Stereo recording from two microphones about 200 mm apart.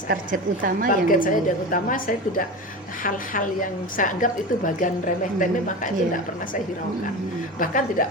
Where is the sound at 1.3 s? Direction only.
40° left (ahead or behind).